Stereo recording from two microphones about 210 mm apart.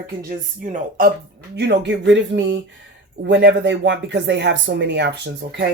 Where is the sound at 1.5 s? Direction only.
55° right (ahead or behind).